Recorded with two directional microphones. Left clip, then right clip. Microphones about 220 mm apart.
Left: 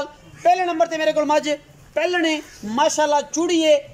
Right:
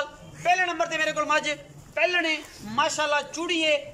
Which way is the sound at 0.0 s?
25° left (ahead or behind).